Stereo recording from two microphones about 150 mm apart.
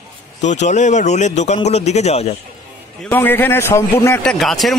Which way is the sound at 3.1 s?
15° left (ahead or behind).